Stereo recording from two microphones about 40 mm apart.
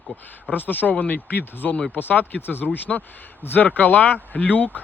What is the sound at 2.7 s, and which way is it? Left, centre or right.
Speech, left.